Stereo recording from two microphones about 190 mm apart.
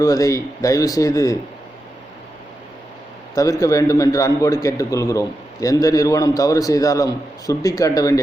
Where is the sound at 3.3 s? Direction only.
20° left (ahead or behind).